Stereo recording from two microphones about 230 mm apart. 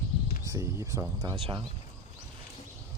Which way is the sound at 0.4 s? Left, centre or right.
Centre.